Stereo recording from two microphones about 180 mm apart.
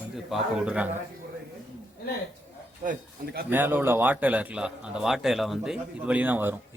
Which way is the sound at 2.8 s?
50° right (ahead or behind).